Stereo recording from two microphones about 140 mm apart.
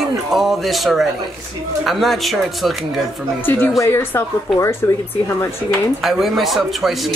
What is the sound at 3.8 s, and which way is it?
Speech, 20° left (ahead or behind).